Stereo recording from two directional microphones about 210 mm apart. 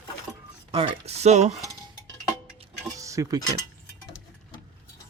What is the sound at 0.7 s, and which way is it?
Speech, 25° right (ahead or behind).